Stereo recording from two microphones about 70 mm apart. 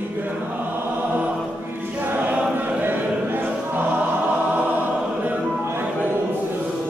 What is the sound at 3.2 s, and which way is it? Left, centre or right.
Music, right.